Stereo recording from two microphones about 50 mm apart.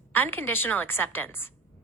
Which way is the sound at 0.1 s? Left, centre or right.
Left.